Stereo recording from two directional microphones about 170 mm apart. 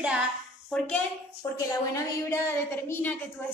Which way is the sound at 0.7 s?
5° left (ahead or behind).